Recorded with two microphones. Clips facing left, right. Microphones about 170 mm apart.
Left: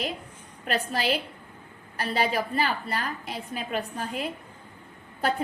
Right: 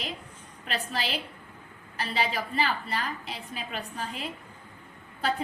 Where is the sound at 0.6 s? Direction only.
45° left (ahead or behind).